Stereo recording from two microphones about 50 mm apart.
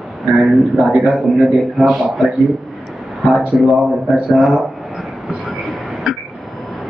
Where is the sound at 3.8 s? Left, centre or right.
Right.